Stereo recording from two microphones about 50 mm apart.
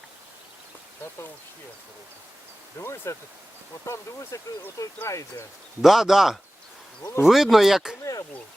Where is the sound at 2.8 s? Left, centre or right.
Left.